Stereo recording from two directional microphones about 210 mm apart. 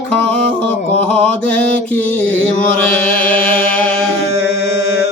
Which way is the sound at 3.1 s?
10° left (ahead or behind).